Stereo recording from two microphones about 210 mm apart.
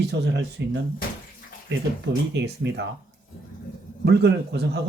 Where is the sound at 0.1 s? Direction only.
55° right (ahead or behind).